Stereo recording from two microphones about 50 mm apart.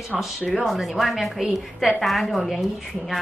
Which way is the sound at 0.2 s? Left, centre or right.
Centre.